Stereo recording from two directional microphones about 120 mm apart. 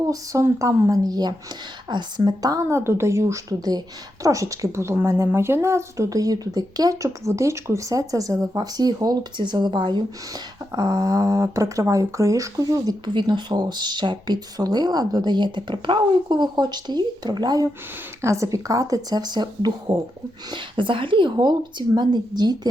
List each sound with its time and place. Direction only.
0.1 s a woman's voice: 25° right (ahead or behind)